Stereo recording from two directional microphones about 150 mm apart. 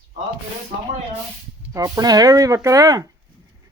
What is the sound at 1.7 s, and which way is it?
Speech, 25° right (ahead or behind).